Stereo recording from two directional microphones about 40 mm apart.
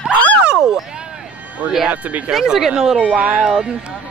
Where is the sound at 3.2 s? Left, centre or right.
Right.